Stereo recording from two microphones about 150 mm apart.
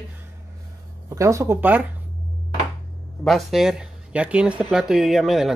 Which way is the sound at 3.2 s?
Centre (ahead or behind).